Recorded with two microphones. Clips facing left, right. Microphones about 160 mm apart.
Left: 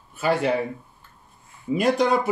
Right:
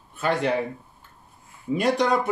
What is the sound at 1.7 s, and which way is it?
Speech, centre (ahead or behind).